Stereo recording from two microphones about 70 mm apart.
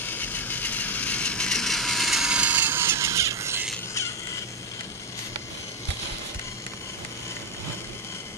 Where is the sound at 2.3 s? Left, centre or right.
Right.